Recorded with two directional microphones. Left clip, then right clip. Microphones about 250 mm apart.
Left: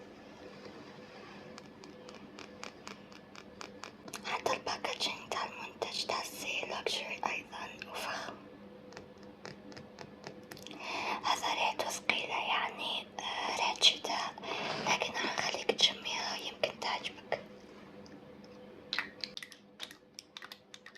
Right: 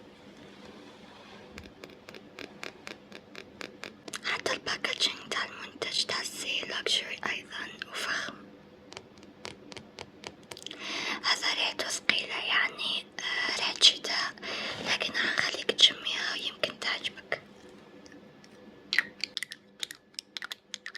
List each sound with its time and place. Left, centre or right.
4.1 s whispering: right
9.4 s a sound: right
19.2 s computer keyboard: right